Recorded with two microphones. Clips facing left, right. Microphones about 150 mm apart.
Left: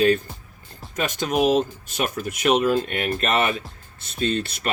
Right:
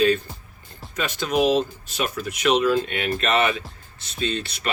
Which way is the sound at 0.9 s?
45° left (ahead or behind).